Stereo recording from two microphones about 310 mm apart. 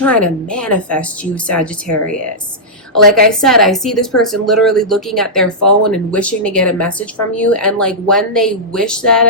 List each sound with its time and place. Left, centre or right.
0.0 s speech: centre
3.4 s speech: centre